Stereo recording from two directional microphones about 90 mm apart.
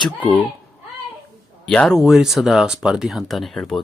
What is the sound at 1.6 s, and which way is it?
Speech, 10° left (ahead or behind).